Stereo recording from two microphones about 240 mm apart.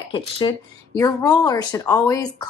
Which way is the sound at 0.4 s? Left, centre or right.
Centre.